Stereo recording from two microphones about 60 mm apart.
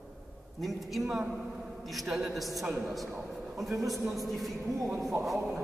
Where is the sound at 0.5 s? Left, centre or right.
Centre.